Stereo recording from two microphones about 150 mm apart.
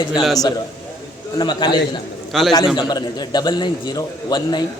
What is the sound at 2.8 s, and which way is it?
A man's voice, 30° left (ahead or behind).